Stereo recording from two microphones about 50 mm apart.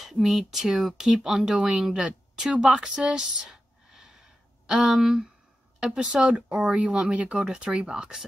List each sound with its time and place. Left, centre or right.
0.0 s speech: centre
2.0 s a sound: centre
4.9 s speech: centre
6.7 s speech: right